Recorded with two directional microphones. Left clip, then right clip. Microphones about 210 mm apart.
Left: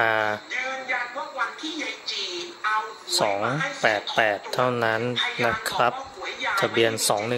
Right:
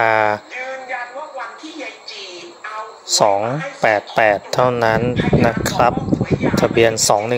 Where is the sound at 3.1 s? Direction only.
25° right (ahead or behind).